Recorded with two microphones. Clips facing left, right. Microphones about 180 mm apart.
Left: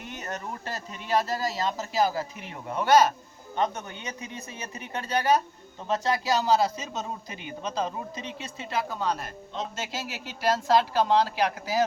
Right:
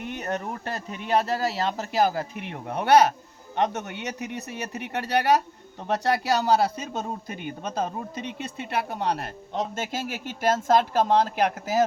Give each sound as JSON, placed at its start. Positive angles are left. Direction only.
{"t": 0.0, "sound": "a man's voice", "side_deg": -60}